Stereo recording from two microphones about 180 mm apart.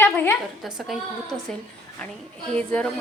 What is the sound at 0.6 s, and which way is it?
Speech, centre (ahead or behind).